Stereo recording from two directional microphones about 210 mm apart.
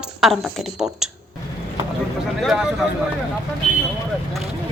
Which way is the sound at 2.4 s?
Centre (ahead or behind).